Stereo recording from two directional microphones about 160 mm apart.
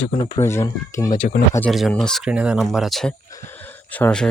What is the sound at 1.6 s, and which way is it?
Speech, centre (ahead or behind).